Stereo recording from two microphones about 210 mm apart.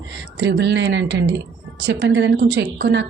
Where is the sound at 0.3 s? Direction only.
55° right (ahead or behind).